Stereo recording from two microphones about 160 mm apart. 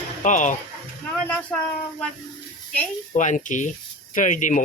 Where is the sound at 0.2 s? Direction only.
50° left (ahead or behind).